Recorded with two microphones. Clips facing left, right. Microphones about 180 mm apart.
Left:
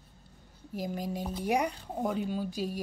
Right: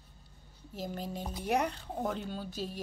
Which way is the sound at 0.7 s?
10° left (ahead or behind).